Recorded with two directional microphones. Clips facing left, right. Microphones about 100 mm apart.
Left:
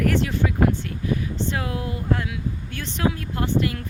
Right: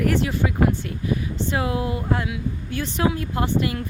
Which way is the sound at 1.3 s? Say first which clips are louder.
Right 3 dB; 15° right (ahead or behind).